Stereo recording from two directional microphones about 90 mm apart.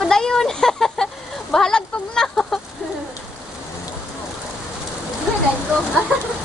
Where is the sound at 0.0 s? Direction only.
5° left (ahead or behind).